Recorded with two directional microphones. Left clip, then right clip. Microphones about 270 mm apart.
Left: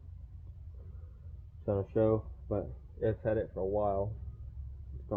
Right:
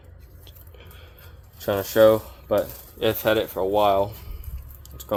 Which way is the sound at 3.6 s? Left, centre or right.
Right.